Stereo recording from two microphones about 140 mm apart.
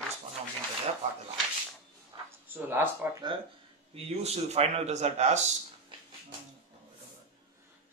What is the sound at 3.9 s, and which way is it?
Speech, 50° right (ahead or behind).